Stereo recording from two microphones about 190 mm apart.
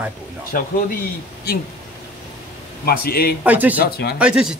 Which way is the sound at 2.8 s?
55° left (ahead or behind).